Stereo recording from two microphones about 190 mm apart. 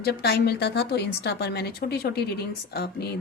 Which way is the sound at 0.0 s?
55° left (ahead or behind).